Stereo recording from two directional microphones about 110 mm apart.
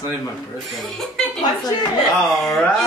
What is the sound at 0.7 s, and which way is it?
Speech, centre (ahead or behind).